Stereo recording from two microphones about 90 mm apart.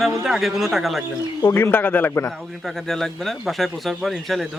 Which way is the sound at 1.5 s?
25° left (ahead or behind).